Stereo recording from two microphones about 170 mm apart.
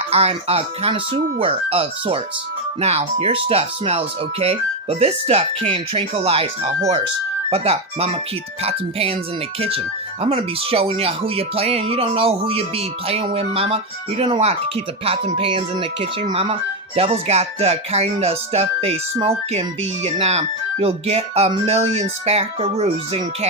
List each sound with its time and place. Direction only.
0.1 s speech: 35° right (ahead or behind)
7.5 s speech: 40° right (ahead or behind)